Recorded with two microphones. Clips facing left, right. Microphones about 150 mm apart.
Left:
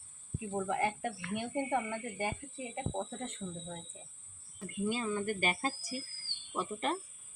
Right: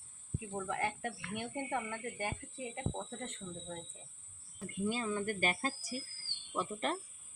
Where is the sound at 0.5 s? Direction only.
20° left (ahead or behind).